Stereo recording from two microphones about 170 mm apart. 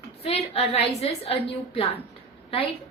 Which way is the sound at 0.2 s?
35° left (ahead or behind).